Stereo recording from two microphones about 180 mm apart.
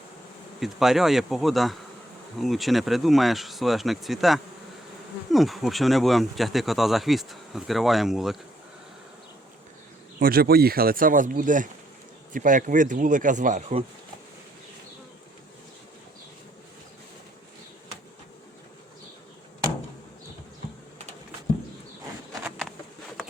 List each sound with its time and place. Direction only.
0.6 s speech: centre (ahead or behind)
10.2 s speech: 55° right (ahead or behind)
22.4 s a sound: centre (ahead or behind)